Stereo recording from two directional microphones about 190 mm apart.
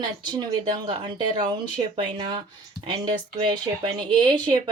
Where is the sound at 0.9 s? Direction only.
25° right (ahead or behind).